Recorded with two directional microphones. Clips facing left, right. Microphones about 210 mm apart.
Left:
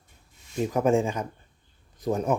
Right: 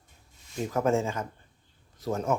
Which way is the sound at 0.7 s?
15° left (ahead or behind).